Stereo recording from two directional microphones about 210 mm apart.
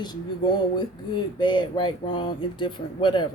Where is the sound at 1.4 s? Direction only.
20° left (ahead or behind).